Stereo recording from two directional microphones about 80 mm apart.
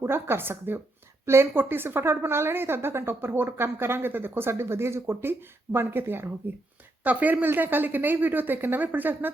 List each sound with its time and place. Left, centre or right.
0.0 s a woman's voice: right